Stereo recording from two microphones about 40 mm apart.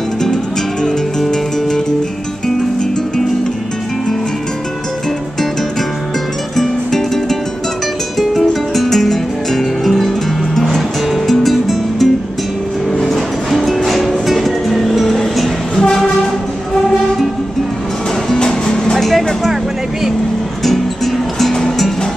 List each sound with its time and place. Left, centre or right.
0.2 s music: centre
6.5 s music: centre
15.8 s train: centre
18.3 s music: centre
18.9 s vehicle: centre
20.6 s music: centre